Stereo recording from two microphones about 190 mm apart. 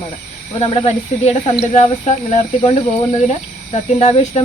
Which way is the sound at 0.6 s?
30° left (ahead or behind).